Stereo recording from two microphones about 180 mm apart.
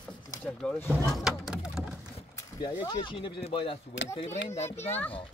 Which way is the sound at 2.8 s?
25° left (ahead or behind).